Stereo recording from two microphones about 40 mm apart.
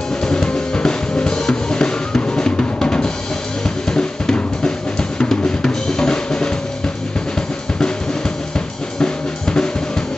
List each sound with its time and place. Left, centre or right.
0.2 s drum: centre
8.5 s drum kit: left